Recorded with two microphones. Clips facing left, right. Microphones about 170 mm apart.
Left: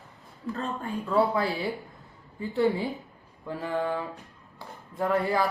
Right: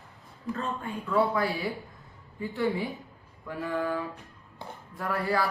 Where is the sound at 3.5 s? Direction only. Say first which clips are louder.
Left 1 dB; 20° left (ahead or behind).